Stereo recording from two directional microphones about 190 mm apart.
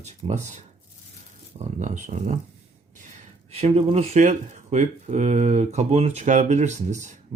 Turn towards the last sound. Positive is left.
turn(degrees=-35)  # may be behind; listen again after turning